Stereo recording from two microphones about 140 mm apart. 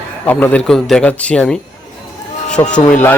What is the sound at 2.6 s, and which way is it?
Speech, 25° left (ahead or behind).